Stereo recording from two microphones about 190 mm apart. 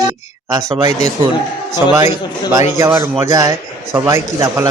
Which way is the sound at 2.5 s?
15° right (ahead or behind).